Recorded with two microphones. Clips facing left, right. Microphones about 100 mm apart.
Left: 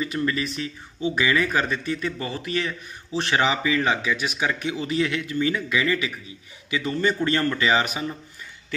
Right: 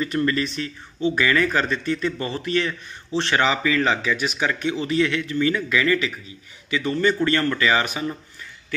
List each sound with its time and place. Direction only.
0.0 s speech: 10° left (ahead or behind)
3.2 s speech: 15° left (ahead or behind)